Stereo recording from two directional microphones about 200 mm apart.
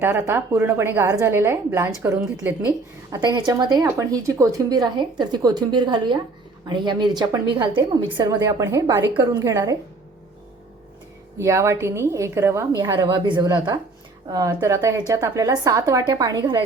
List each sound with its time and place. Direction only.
0.0 s a woman's voice: 10° right (ahead or behind)
3.1 s a woman's voice: 20° right (ahead or behind)
11.3 s a woman's voice: 15° right (ahead or behind)